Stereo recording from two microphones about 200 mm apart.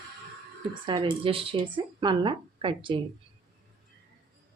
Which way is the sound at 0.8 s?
25° right (ahead or behind).